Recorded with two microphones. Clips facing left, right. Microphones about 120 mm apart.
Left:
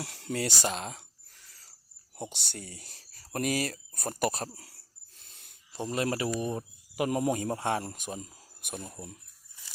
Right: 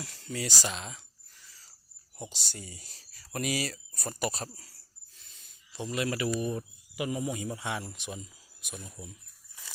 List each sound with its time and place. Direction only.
0.0 s a sound: 65° left (ahead or behind)
2.1 s speech: 60° left (ahead or behind)
5.1 s filing: 55° left (ahead or behind); by 6.3 s 35° left (ahead or behind)
6.4 s speech: 30° left (ahead or behind)
6.9 s speech: 55° left (ahead or behind)